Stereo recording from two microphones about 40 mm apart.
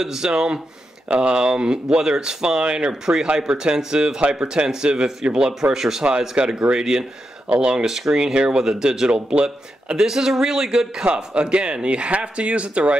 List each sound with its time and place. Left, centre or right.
0.0 s speech: centre
7.4 s speech: right
7.8 s speech: centre
9.3 s speech: right
9.9 s speech: centre
11.1 s speech: right